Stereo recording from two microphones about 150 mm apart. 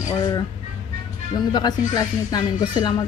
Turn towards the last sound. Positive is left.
turn(degrees=30)  # may be behind; listen again after turning